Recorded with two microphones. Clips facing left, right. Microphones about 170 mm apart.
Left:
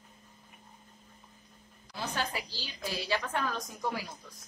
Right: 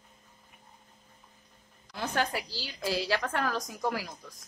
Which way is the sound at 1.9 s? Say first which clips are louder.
Right 4 dB; 55° right (ahead or behind).